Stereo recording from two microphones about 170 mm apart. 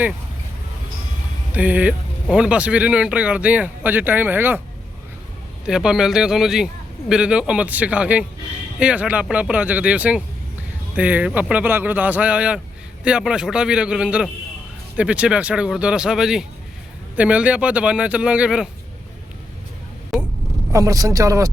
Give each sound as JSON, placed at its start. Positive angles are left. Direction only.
{"t": 1.5, "sound": "speech", "side_deg": -10}
{"t": 5.6, "sound": "speech", "side_deg": -5}
{"t": 20.1, "sound": "a sound", "side_deg": 0}
{"t": 20.7, "sound": "speech", "side_deg": -20}